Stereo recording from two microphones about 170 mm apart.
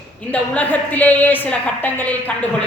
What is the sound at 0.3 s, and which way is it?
A woman's voice, 10° left (ahead or behind).